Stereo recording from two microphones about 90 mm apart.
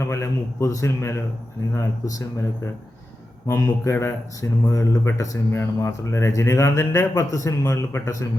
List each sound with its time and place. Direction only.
0.0 s speech: 30° left (ahead or behind)